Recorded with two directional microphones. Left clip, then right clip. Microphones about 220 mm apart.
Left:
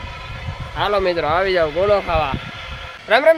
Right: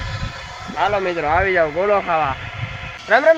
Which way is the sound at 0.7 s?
20° left (ahead or behind).